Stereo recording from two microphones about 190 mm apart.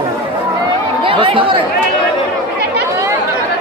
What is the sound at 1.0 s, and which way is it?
Speech, 25° right (ahead or behind).